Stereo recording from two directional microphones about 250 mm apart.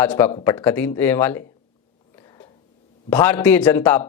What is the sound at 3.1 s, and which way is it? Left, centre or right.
Speech, centre.